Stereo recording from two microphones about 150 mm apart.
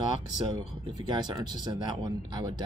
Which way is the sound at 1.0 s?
30° right (ahead or behind).